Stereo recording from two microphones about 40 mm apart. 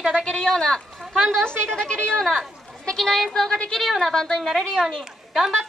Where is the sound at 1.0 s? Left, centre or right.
Centre.